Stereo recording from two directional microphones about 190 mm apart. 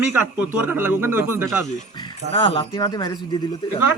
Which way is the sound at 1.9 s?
25° left (ahead or behind).